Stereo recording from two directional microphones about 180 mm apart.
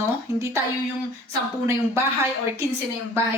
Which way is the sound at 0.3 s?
15° right (ahead or behind).